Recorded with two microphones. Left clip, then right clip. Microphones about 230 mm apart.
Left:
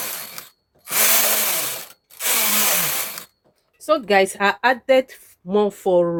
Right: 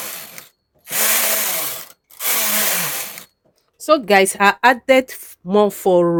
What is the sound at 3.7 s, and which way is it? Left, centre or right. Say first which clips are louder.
Speech: right 3 dB; right.